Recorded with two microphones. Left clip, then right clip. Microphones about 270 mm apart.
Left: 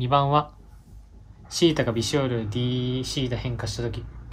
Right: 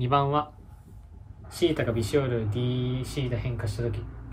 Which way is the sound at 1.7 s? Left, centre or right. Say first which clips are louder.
Left 3 dB; centre.